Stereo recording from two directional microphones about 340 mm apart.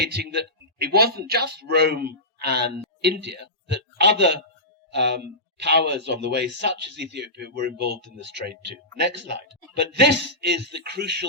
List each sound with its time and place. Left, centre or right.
0.0 s a man's voice: right